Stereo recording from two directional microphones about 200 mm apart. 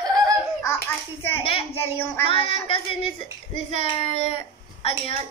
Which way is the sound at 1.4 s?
25° left (ahead or behind).